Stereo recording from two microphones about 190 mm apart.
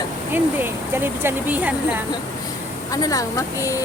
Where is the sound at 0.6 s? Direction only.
10° right (ahead or behind).